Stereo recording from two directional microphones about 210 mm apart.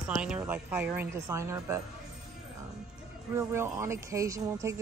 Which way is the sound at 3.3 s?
10° right (ahead or behind).